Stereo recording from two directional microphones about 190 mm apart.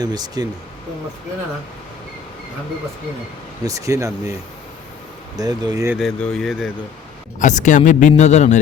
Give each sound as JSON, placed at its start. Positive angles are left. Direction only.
{"t": 0.0, "sound": "speech", "side_deg": -20}
{"t": 3.7, "sound": "speech", "side_deg": -15}
{"t": 5.4, "sound": "speech", "side_deg": -20}
{"t": 6.0, "sound": "speech", "side_deg": 5}
{"t": 7.3, "sound": "speech", "side_deg": 40}